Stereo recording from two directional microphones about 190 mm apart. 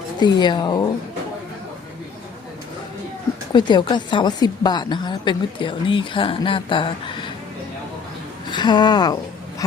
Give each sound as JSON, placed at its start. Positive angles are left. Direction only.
{"t": 0.2, "sound": "a woman's voice", "side_deg": 20}
{"t": 3.5, "sound": "a woman's voice", "side_deg": 25}
{"t": 8.4, "sound": "a woman's voice", "side_deg": 25}